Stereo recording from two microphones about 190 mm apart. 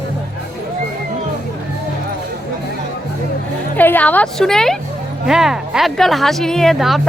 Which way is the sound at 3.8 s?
10° left (ahead or behind).